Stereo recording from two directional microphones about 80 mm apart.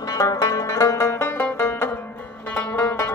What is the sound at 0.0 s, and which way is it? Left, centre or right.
Music, left.